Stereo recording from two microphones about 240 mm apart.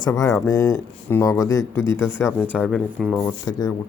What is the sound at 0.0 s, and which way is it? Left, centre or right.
Speech, centre.